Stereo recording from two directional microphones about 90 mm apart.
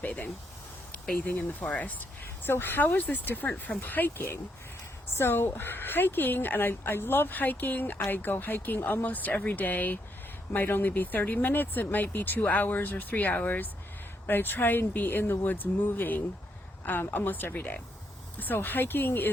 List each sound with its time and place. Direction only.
0.0 s speech: 20° left (ahead or behind)